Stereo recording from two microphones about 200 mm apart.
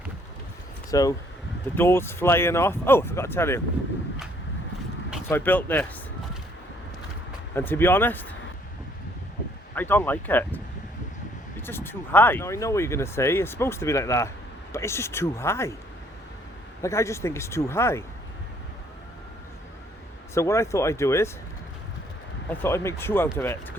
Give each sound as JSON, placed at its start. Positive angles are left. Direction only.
{"t": 0.9, "sound": "speech", "side_deg": 15}
{"t": 5.3, "sound": "speech", "side_deg": 10}
{"t": 7.5, "sound": "speech", "side_deg": 10}
{"t": 9.7, "sound": "speech", "side_deg": 10}
{"t": 11.6, "sound": "speech", "side_deg": 10}
{"t": 16.8, "sound": "speech", "side_deg": 15}
{"t": 20.3, "sound": "speech", "side_deg": 15}
{"t": 22.6, "sound": "speech", "side_deg": 15}